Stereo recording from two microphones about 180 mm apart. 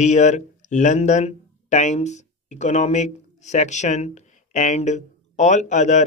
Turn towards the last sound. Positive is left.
turn(degrees=40)  # may be behind; listen again after turning